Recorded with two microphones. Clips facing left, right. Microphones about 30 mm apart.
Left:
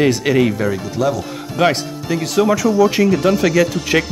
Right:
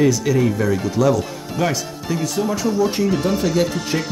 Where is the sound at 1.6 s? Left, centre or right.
Left.